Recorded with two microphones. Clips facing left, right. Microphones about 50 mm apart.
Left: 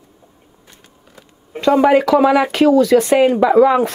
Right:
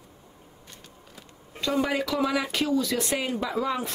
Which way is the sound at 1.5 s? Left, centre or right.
Left.